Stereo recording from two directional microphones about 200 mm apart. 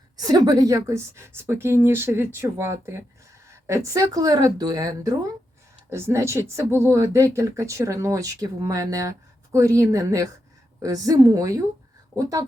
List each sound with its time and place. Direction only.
0.2 s speech: 20° right (ahead or behind)